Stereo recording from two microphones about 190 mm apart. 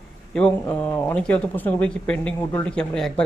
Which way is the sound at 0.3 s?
10° left (ahead or behind).